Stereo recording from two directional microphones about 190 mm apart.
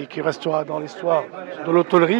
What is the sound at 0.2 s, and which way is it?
Speech, 10° right (ahead or behind).